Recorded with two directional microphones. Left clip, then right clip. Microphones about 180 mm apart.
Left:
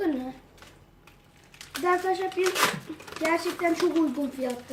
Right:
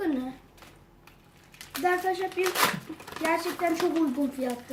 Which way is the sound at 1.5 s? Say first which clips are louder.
Left 1 dB; 15° right (ahead or behind).